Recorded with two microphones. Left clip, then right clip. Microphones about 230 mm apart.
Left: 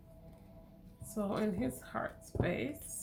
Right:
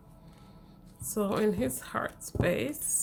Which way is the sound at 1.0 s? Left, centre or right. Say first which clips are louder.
Right 8 dB; right.